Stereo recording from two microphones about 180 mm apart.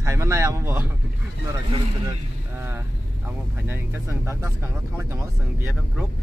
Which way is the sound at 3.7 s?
15° right (ahead or behind).